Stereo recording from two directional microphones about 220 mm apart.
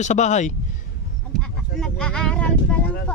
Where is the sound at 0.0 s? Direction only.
30° left (ahead or behind).